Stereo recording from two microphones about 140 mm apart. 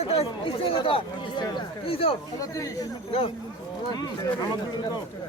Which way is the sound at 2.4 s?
25° left (ahead or behind).